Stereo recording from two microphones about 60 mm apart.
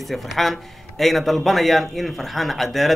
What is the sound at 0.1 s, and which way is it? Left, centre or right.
A man's voice, centre.